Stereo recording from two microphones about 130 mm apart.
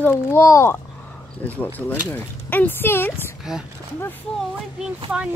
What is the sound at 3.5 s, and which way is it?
Speech, 5° right (ahead or behind).